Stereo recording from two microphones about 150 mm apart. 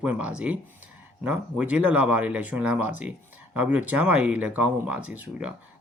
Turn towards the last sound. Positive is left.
turn(degrees=-10)  # may be behind; listen again after turning